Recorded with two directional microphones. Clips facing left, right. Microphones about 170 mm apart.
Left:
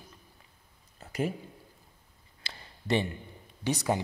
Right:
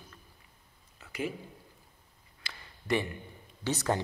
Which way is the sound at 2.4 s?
30° left (ahead or behind).